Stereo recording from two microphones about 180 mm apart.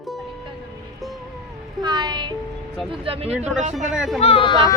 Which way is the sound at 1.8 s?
25° right (ahead or behind).